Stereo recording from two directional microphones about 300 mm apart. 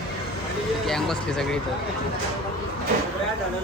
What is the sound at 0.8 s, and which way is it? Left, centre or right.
Speech, centre.